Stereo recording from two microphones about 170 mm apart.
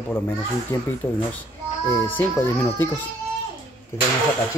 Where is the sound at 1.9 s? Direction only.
15° left (ahead or behind).